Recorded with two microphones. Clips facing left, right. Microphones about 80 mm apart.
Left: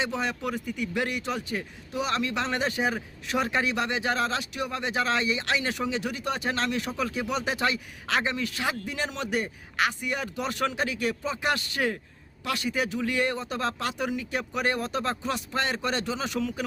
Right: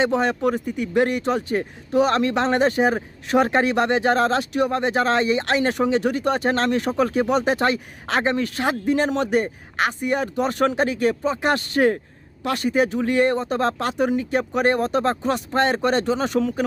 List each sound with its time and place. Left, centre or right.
0.0 s speech: right